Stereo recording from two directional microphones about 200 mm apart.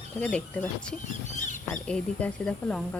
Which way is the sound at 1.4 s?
40° left (ahead or behind).